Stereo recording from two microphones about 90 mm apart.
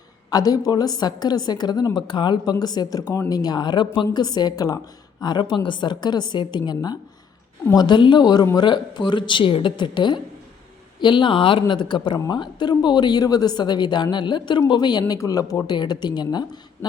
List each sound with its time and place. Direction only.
0.3 s a woman's voice: 45° left (ahead or behind)
2.0 s a woman's voice: 60° left (ahead or behind); by 4.8 s 45° left (ahead or behind)
5.2 s speech: 55° left (ahead or behind); by 11.6 s 70° left (ahead or behind)
11.7 s a woman's voice: 60° left (ahead or behind); by 15.7 s 40° left (ahead or behind)
15.7 s a woman's voice: 55° left (ahead or behind)